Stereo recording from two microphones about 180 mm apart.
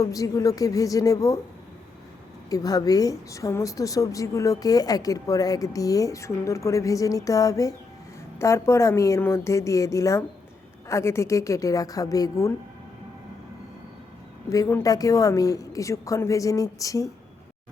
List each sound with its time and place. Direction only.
0.0 s a woman's voice: 20° left (ahead or behind)
2.5 s a woman's voice: 20° left (ahead or behind)
14.5 s a woman's voice: 20° left (ahead or behind)